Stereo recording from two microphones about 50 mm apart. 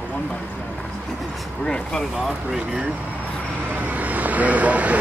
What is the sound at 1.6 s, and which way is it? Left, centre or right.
Speech, centre.